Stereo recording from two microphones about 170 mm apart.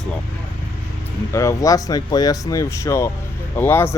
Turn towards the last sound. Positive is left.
turn(degrees=10)  # may be behind; listen again after turning